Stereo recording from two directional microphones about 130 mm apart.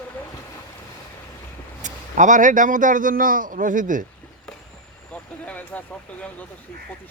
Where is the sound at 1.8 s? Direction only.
75° right (ahead or behind).